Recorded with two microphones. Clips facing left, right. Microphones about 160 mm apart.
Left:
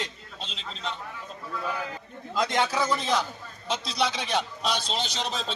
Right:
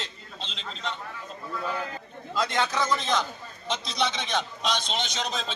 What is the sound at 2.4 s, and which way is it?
A man's voice, 15° left (ahead or behind).